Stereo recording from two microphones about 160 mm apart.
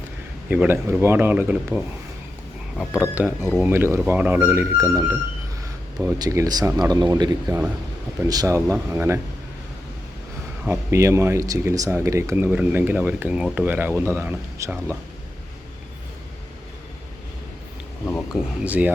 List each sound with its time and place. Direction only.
0.5 s speech: 15° right (ahead or behind)
6.1 s speech: 25° right (ahead or behind)
10.7 s speech: 15° right (ahead or behind)
18.3 s speech: 10° right (ahead or behind)